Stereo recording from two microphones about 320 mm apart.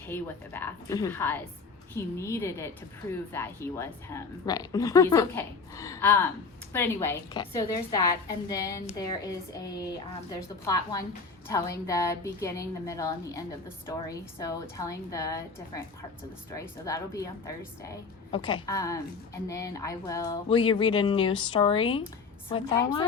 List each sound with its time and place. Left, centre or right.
0.1 s a woman's voice: centre